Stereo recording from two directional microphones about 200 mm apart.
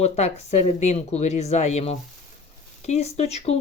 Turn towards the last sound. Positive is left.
turn(degrees=30)  # may be behind; listen again after turning